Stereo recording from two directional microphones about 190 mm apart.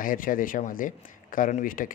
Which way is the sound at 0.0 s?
45° left (ahead or behind).